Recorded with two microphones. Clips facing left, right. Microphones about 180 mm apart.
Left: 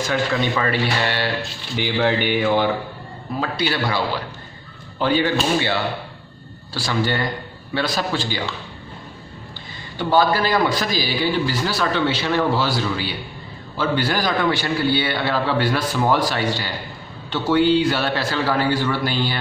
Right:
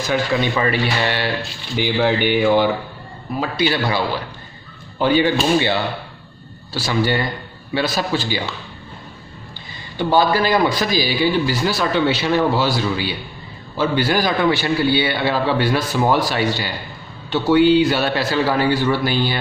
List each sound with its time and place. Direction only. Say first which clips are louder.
0.1 s a man's voice: right 3 dB; 15° right (ahead or behind)
9.9 s a man's voice: right 2 dB; 15° right (ahead or behind)